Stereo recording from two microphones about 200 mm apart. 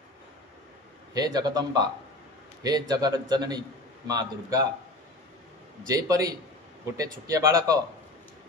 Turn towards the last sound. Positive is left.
turn(degrees=-20)  # may be behind; listen again after turning